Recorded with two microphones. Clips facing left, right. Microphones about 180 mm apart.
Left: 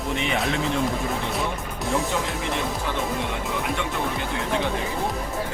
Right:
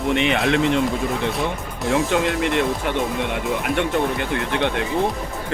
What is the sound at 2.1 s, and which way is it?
Speech, 70° right (ahead or behind).